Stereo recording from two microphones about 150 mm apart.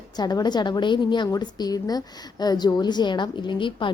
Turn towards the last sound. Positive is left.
turn(degrees=35)  # may be behind; listen again after turning